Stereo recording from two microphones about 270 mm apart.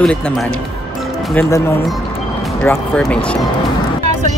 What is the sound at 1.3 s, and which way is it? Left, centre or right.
Speech, centre.